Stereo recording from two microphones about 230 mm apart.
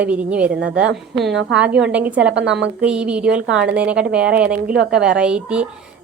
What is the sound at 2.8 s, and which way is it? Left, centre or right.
A woman's voice, centre.